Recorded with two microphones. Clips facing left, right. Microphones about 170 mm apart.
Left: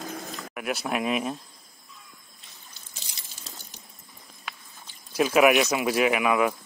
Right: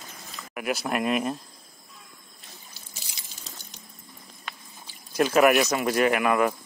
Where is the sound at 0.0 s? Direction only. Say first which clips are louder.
Left 10 dB; 65° left (ahead or behind).